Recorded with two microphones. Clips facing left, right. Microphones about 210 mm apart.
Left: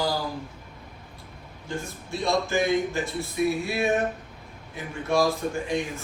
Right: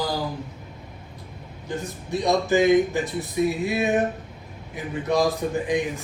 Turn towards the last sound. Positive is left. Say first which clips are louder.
# right 4 dB
turn(degrees=-20)  # may be behind; listen again after turning